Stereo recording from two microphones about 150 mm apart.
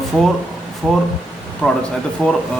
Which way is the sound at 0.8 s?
5° right (ahead or behind).